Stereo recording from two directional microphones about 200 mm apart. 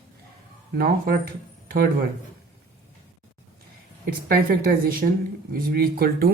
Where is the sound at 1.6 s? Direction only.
50° right (ahead or behind).